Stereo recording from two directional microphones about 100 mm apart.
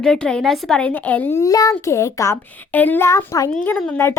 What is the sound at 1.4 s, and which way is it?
Speech, 35° left (ahead or behind).